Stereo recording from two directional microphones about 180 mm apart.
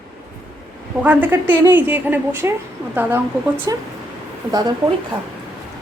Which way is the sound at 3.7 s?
20° right (ahead or behind).